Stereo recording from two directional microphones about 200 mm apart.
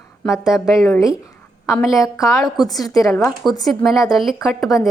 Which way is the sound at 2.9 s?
15° left (ahead or behind).